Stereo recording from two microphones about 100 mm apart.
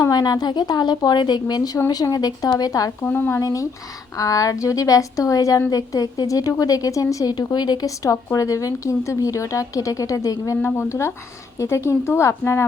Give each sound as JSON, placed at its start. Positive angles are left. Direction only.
{"t": 0.0, "sound": "a woman's voice", "side_deg": 40}
{"t": 3.0, "sound": "a woman's voice", "side_deg": 20}
{"t": 3.4, "sound": "a woman's voice", "side_deg": 35}